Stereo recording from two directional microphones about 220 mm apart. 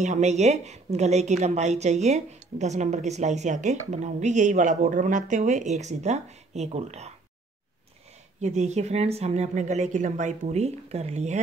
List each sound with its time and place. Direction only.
0.0 s speech: 30° right (ahead or behind)
8.4 s a woman's voice: 30° right (ahead or behind)